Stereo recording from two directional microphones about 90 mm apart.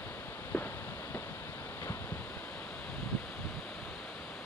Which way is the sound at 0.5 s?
20° left (ahead or behind).